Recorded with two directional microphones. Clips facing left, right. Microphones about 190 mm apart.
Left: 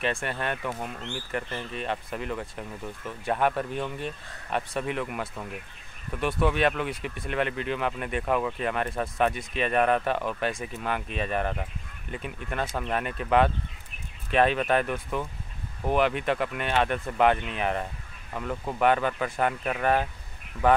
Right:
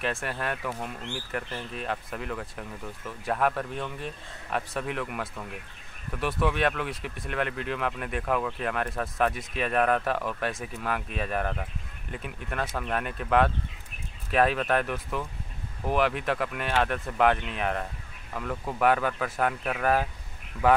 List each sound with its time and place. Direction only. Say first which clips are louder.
0.0 s speech: left 2 dB; centre (ahead or behind)